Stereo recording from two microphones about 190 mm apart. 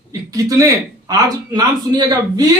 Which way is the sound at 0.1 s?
20° right (ahead or behind).